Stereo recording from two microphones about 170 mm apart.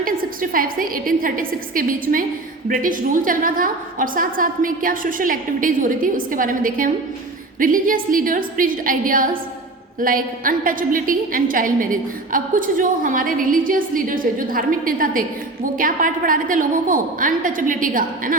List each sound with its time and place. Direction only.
0.5 s a woman's voice: 55° right (ahead or behind)